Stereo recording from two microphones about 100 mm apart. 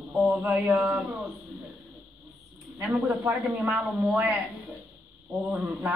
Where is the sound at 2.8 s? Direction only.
15° right (ahead or behind).